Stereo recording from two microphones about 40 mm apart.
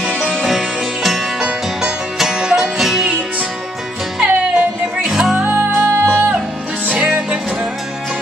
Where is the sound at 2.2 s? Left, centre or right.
Centre.